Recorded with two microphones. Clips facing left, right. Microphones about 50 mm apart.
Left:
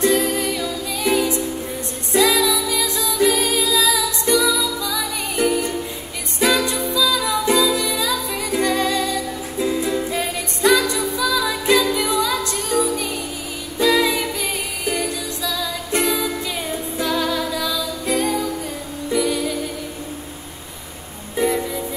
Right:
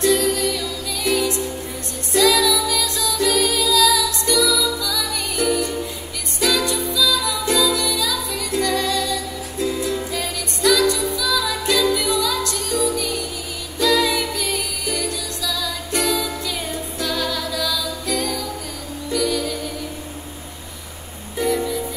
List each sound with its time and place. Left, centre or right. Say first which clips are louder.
0.0 s music: even; left
13.7 s music: left 1 dB; left